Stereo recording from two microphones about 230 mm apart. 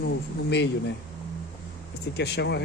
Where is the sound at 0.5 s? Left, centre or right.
Left.